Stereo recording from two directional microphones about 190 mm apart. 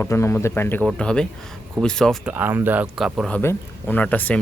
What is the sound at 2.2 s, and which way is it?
Speech, 10° right (ahead or behind).